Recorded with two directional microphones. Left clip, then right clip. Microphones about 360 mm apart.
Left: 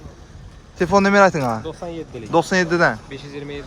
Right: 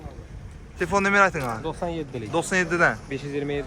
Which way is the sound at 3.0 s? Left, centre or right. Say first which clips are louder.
Right 3 dB; right.